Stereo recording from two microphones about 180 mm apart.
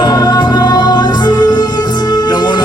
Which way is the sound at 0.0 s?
20° left (ahead or behind).